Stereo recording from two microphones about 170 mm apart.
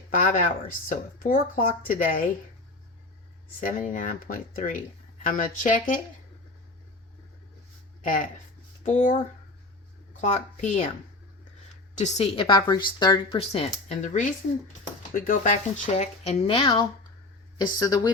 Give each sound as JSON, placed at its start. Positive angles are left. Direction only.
{"t": 0.1, "sound": "speech", "side_deg": 50}
{"t": 3.6, "sound": "speech", "side_deg": 55}
{"t": 8.0, "sound": "speech", "side_deg": 50}
{"t": 11.9, "sound": "a woman's voice", "side_deg": 40}
{"t": 13.4, "sound": "a woman's voice", "side_deg": 35}